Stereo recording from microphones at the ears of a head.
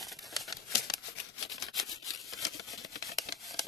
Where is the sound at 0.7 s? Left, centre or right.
Left.